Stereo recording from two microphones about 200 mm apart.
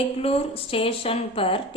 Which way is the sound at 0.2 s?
30° left (ahead or behind).